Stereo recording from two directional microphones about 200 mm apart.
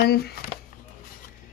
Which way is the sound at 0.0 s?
50° left (ahead or behind).